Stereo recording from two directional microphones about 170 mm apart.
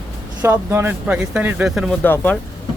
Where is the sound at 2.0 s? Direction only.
10° left (ahead or behind).